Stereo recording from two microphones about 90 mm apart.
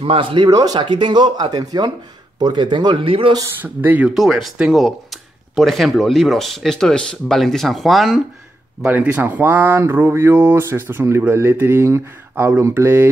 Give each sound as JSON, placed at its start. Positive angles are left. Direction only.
{"t": 0.0, "sound": "speech", "side_deg": -85}
{"t": 0.5, "sound": "speech", "side_deg": -45}
{"t": 0.7, "sound": "speech", "side_deg": -60}
{"t": 3.0, "sound": "speech", "side_deg": -80}
{"t": 3.6, "sound": "speech", "side_deg": -20}
{"t": 4.1, "sound": "speech", "side_deg": 0}
{"t": 8.8, "sound": "speech", "side_deg": -15}